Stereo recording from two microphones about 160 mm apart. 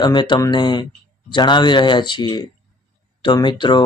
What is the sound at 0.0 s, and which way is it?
Speech, 30° left (ahead or behind).